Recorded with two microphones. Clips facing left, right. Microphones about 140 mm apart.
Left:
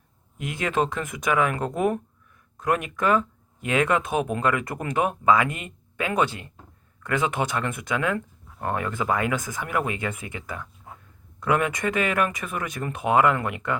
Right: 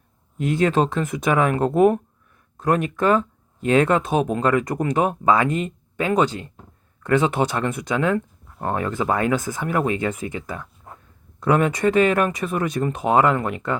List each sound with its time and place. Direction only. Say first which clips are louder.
0.7 s speech: right 4 dB; 25° right (ahead or behind)